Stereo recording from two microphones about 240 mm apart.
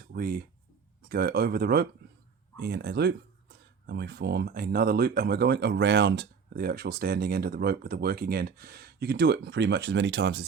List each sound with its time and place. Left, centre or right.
0.1 s speech: right